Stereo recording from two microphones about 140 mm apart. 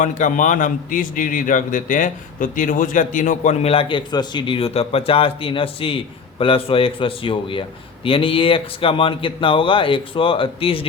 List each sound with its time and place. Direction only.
0.0 s a man's voice: 60° left (ahead or behind); by 10.8 s 40° left (ahead or behind)